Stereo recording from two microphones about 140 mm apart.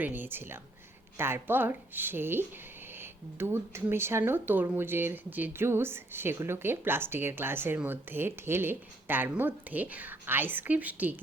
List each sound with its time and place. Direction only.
0.0 s speech: 15° right (ahead or behind)